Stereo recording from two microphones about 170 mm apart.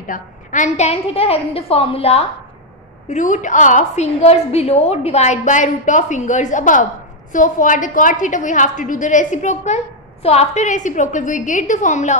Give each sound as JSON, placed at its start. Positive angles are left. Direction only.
{"t": 0.0, "sound": "a woman's voice", "side_deg": 50}
{"t": 3.1, "sound": "a woman's voice", "side_deg": 45}